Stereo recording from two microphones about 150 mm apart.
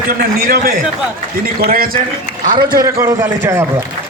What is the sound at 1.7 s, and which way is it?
Speech, 75° right (ahead or behind).